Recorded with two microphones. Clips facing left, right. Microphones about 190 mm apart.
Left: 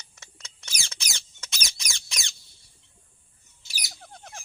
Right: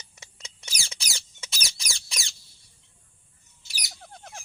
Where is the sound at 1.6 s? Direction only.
30° right (ahead or behind).